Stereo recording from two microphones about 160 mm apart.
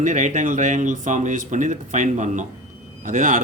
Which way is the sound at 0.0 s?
50° right (ahead or behind).